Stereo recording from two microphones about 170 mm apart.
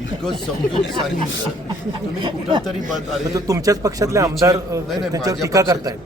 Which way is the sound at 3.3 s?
20° right (ahead or behind).